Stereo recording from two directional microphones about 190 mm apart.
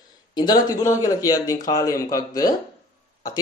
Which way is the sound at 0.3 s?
20° left (ahead or behind).